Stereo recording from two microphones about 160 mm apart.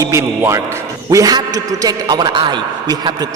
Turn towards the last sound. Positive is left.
turn(degrees=-25)  # may be behind; listen again after turning